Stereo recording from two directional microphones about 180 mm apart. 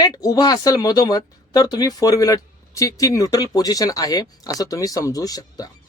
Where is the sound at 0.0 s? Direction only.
20° left (ahead or behind).